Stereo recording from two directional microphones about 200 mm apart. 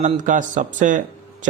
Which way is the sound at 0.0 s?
40° right (ahead or behind).